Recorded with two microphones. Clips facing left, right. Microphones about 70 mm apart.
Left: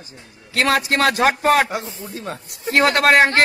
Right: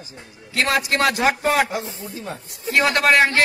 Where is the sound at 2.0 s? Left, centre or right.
Left.